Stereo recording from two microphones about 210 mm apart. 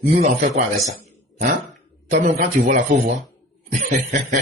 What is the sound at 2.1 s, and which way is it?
Speech, 40° right (ahead or behind).